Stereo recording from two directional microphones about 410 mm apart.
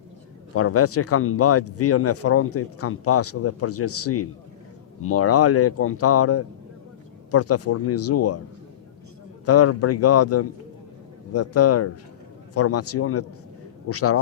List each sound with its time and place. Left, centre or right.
0.5 s speech: left
9.5 s speech: left